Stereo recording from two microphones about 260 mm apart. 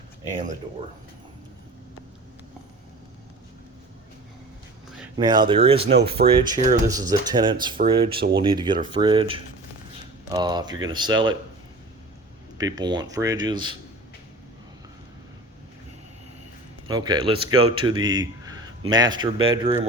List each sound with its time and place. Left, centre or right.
5.1 s speech: centre
12.5 s speech: centre
16.8 s a man's voice: centre